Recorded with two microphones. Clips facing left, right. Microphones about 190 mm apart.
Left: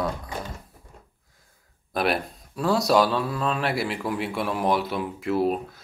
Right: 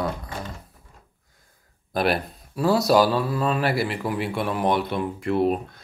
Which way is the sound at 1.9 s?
Centre (ahead or behind).